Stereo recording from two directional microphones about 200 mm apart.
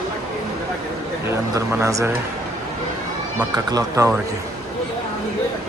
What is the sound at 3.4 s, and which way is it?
Speech, 15° right (ahead or behind).